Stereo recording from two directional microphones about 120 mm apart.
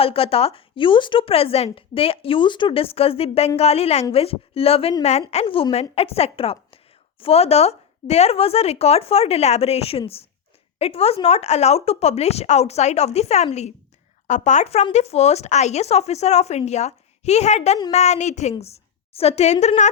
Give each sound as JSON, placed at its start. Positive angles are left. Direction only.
{"t": 0.0, "sound": "speech", "side_deg": 50}
{"t": 14.3, "sound": "a woman's voice", "side_deg": 85}
{"t": 18.6, "sound": "speech", "side_deg": 55}